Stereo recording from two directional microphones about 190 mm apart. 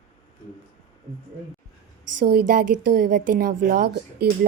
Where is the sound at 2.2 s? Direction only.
50° right (ahead or behind).